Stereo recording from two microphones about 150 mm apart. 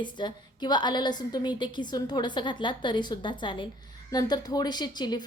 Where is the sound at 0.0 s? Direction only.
30° left (ahead or behind).